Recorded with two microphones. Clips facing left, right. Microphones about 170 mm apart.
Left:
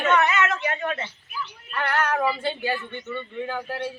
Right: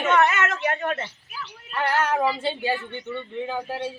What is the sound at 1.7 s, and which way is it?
Speech, 25° right (ahead or behind).